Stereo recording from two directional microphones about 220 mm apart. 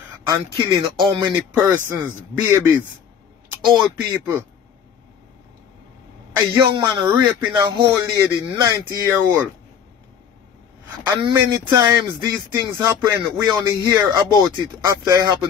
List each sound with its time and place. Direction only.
0.3 s a man's voice: 20° right (ahead or behind)
6.3 s a man's voice: 15° right (ahead or behind)
11.1 s a man's voice: 20° right (ahead or behind)